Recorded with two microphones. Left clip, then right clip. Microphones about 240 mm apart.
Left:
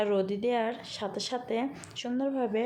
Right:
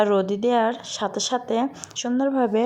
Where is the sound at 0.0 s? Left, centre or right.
Right.